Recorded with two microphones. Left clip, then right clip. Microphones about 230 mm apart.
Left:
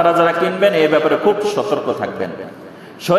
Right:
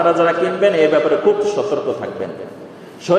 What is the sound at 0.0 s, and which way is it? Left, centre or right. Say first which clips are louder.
A man's voice: left 1 dB; left.